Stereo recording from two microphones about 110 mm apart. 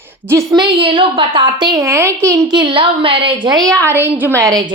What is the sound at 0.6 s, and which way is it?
A woman's voice, 50° right (ahead or behind).